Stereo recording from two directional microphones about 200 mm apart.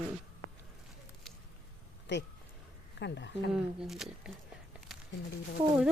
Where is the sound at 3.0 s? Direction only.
60° left (ahead or behind).